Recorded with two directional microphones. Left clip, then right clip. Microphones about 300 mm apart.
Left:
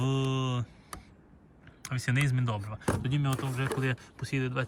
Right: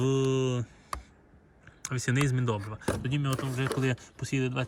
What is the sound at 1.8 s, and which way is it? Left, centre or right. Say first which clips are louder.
Speech: right 2 dB; centre.